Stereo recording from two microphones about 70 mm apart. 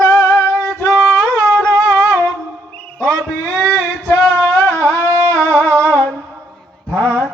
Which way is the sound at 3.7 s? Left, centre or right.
Left.